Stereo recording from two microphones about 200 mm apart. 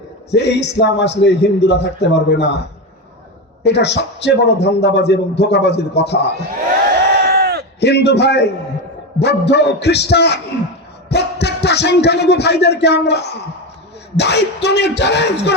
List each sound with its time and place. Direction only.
0.3 s a man's voice: 55° left (ahead or behind)
3.6 s a man's voice: 60° left (ahead or behind)
7.3 s a sound: 55° right (ahead or behind)
7.8 s a man's voice: 55° left (ahead or behind)
11.1 s music: 55° left (ahead or behind)
14.2 s a man's voice: 55° left (ahead or behind)